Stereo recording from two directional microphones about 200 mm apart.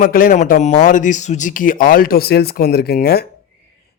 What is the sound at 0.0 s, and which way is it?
A man's voice, 45° left (ahead or behind).